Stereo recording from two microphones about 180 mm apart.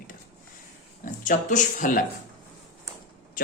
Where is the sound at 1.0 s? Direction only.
45° left (ahead or behind).